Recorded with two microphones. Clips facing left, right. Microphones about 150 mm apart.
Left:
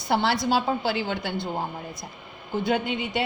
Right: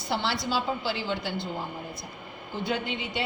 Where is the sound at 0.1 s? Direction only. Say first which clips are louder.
Left 6 dB; 55° left (ahead or behind).